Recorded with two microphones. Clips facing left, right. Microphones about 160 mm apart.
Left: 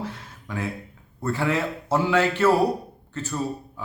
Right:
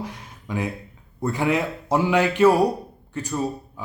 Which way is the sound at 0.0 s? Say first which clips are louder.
Even; 15° right (ahead or behind).